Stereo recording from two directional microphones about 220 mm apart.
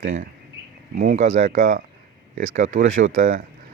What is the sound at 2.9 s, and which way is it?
Speech, 60° right (ahead or behind).